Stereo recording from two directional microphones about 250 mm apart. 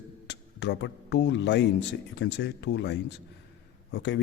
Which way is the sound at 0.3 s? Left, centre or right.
Left.